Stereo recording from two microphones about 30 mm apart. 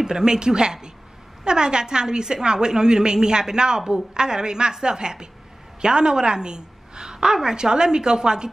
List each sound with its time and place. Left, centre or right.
0.0 s a woman's voice: right